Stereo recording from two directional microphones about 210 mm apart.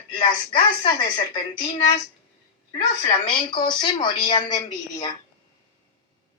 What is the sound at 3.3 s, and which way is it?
A woman's voice, 20° left (ahead or behind).